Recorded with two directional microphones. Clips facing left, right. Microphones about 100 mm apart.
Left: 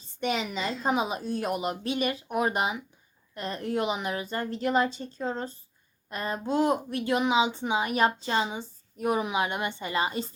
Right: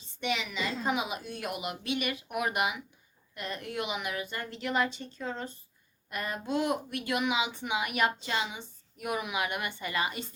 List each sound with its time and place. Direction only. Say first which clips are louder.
0.2 s a woman's voice: left 4 dB; 40° left (ahead or behind)